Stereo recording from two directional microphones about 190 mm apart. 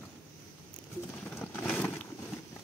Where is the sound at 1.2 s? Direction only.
5° left (ahead or behind).